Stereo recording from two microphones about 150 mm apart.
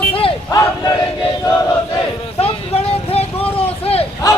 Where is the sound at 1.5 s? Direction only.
25° left (ahead or behind).